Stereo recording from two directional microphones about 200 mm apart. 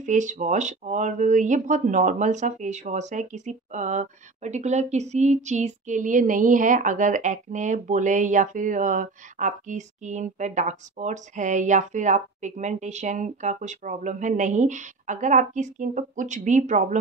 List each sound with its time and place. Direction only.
0.0 s speech: 40° right (ahead or behind)